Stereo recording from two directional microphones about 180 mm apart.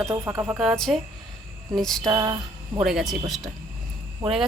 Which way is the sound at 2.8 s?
Centre (ahead or behind).